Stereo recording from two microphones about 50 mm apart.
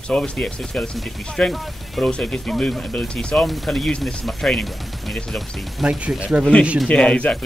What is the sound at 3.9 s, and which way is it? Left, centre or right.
Speech, centre.